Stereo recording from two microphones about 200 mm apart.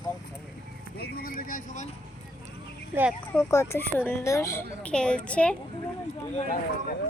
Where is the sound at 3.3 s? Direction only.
15° left (ahead or behind).